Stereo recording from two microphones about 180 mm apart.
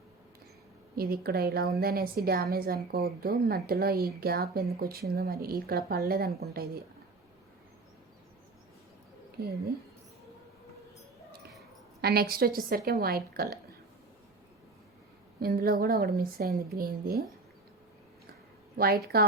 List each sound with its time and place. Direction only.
0.9 s a woman's voice: 55° right (ahead or behind)
9.4 s a woman's voice: 60° right (ahead or behind)
12.0 s a woman's voice: 60° right (ahead or behind)
15.4 s a woman's voice: 55° right (ahead or behind)
19.1 s a woman's voice: 60° right (ahead or behind)